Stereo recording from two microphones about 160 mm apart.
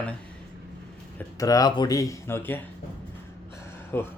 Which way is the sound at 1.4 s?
20° left (ahead or behind).